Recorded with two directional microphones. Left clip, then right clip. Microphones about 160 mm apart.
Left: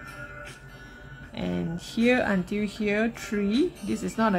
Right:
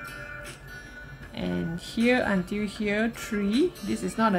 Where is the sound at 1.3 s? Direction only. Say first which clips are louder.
Even; 10° left (ahead or behind).